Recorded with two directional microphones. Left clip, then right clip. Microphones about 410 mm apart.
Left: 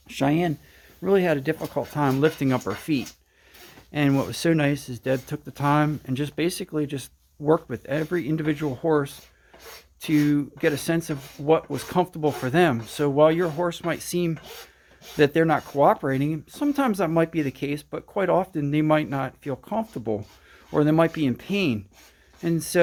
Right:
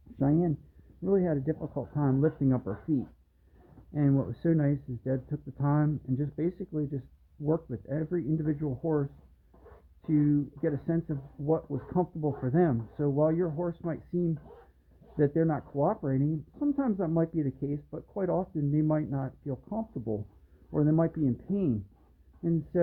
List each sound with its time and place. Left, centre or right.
0.2 s speech: centre
10.3 s speech: centre